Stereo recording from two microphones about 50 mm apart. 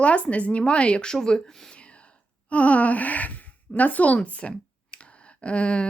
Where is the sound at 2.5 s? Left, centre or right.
Left.